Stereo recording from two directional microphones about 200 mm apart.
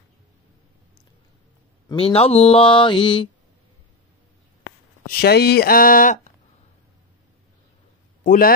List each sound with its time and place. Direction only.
1.9 s speech: 25° left (ahead or behind)
5.0 s speech: 55° left (ahead or behind)
8.2 s a man's voice: 45° left (ahead or behind)